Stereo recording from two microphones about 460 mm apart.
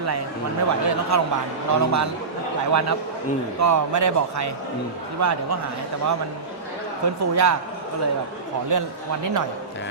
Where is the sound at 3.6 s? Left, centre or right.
Right.